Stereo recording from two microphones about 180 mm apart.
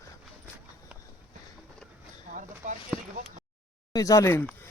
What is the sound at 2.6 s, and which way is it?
Speech, 45° right (ahead or behind).